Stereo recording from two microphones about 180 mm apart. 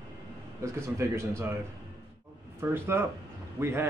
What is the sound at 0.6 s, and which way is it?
Speech, 15° right (ahead or behind).